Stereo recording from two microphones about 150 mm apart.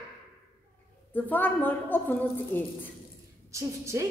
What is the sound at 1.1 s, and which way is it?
A woman's voice, 10° left (ahead or behind).